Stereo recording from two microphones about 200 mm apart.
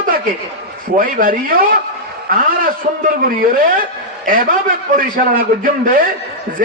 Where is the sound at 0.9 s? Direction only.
45° right (ahead or behind).